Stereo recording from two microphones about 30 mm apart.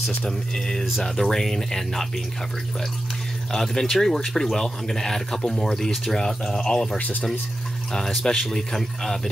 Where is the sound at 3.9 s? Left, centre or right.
Centre.